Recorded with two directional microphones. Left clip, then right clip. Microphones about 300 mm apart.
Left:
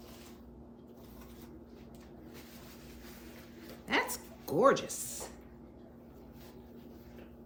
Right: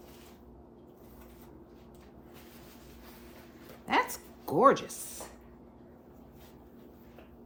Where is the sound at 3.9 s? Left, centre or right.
Centre.